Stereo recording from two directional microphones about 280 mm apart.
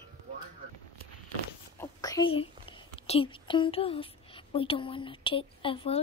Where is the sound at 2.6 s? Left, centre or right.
Centre.